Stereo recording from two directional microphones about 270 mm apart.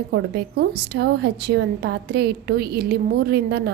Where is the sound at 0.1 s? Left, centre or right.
Right.